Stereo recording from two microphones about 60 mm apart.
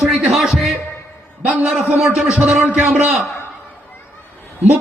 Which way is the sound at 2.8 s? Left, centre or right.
Right.